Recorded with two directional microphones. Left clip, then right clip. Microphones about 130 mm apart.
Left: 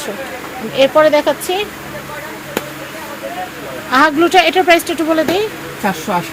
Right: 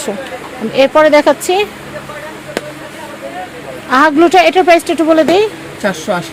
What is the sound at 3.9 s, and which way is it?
Speech, 70° right (ahead or behind).